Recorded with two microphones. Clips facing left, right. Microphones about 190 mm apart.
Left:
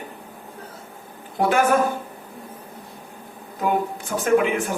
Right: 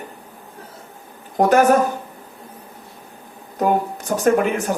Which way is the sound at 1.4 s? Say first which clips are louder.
Right 5 dB; 40° right (ahead or behind).